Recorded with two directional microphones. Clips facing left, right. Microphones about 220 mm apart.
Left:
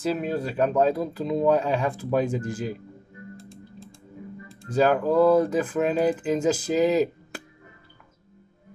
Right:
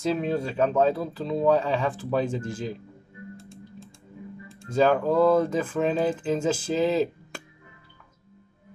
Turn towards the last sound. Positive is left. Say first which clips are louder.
# left 2 dB
turn(degrees=10)  # may be behind; listen again after turning